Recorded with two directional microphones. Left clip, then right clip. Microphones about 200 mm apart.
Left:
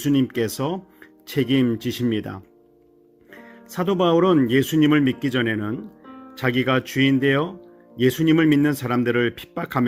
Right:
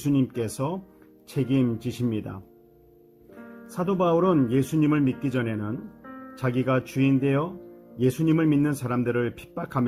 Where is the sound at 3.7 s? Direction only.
25° left (ahead or behind).